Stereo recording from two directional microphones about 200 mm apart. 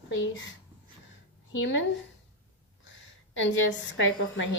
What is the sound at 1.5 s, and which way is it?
Speech, 70° left (ahead or behind).